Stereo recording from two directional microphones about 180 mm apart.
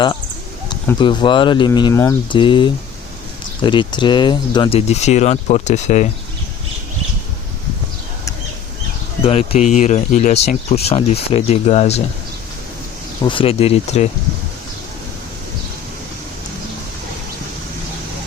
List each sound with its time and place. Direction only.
0.9 s speech: 25° left (ahead or behind)
2.3 s speech: 25° left (ahead or behind)
4.9 s speech: 40° left (ahead or behind)
9.2 s speech: 35° left (ahead or behind)
13.2 s speech: 30° left (ahead or behind)